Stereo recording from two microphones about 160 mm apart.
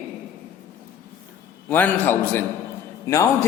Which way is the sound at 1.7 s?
10° left (ahead or behind).